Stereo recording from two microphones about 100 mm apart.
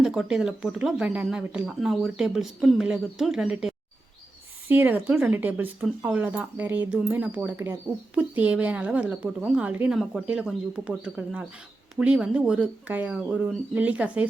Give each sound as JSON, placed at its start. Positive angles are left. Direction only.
{"t": 0.0, "sound": "speech", "side_deg": -5}
{"t": 4.7, "sound": "speech", "side_deg": -20}
{"t": 8.1, "sound": "speech", "side_deg": -15}